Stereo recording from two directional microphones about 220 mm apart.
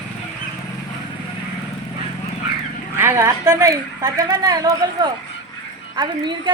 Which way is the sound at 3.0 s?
10° right (ahead or behind).